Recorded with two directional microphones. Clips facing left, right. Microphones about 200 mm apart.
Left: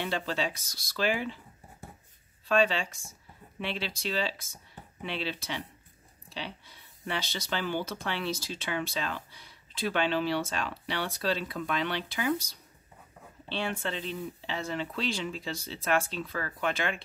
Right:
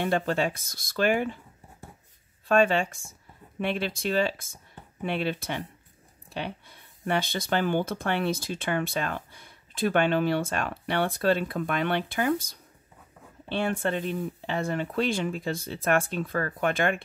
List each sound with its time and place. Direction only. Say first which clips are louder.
0.0 s speech: right 6 dB; 50° right (ahead or behind)
2.4 s speech: right 4 dB; 50° right (ahead or behind)